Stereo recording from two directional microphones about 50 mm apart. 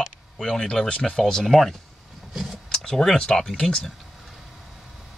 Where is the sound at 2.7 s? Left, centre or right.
Centre.